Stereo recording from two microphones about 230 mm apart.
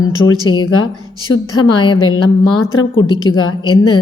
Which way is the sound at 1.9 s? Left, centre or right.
Left.